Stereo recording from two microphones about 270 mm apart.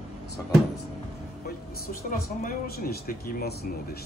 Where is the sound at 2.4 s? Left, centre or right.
Left.